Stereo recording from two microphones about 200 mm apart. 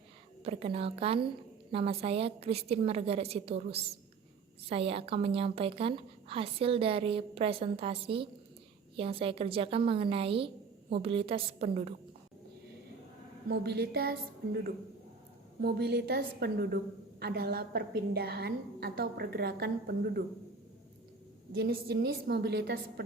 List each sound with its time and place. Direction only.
0.4 s a woman's voice: 30° right (ahead or behind)
13.5 s a woman's voice: 55° right (ahead or behind)
15.6 s a woman's voice: 55° right (ahead or behind)
21.6 s a woman's voice: 55° right (ahead or behind)